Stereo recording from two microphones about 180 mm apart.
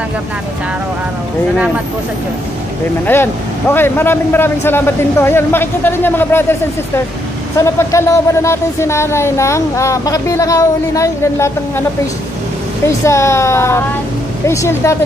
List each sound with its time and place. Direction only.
3.1 s speech: 10° left (ahead or behind)
7.5 s speech: 15° left (ahead or behind)
12.8 s speech: 15° left (ahead or behind)